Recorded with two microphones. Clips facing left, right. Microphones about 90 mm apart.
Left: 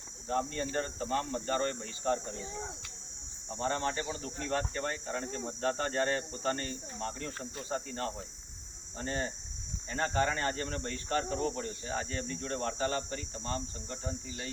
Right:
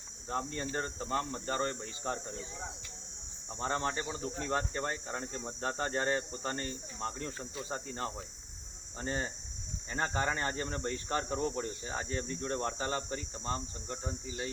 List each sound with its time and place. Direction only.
0.3 s speech: 20° right (ahead or behind)
3.6 s speech: 15° right (ahead or behind)